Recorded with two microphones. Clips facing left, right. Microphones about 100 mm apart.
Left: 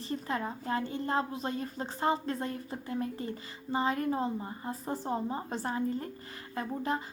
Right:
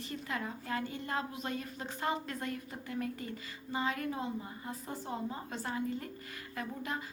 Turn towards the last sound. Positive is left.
turn(degrees=30)  # may be behind; listen again after turning